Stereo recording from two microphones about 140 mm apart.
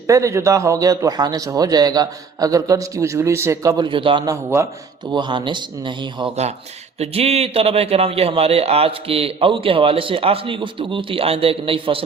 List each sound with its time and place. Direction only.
0.1 s a man's voice: 20° right (ahead or behind); by 4.2 s 35° right (ahead or behind)
4.6 s a man's voice: 20° right (ahead or behind)
5.1 s speech: 35° right (ahead or behind)
7.0 s a man's voice: 45° right (ahead or behind)